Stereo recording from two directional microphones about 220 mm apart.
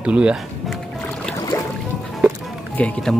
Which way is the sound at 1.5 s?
15° left (ahead or behind).